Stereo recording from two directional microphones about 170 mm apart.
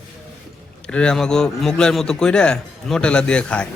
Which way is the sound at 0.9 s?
5° left (ahead or behind).